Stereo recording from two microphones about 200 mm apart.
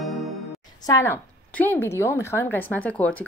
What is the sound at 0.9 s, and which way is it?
A woman's voice, 15° left (ahead or behind).